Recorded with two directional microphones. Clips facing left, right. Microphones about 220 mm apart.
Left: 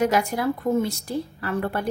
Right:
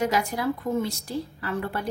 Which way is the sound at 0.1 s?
50° left (ahead or behind).